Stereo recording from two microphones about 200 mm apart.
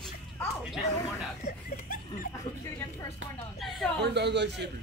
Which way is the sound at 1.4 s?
45° left (ahead or behind).